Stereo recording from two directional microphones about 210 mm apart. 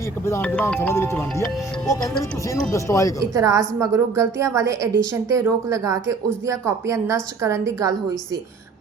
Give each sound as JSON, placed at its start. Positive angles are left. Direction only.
{"t": 0.3, "sound": "speech", "side_deg": 10}
{"t": 2.5, "sound": "speech", "side_deg": 15}
{"t": 3.2, "sound": "a woman's voice", "side_deg": -15}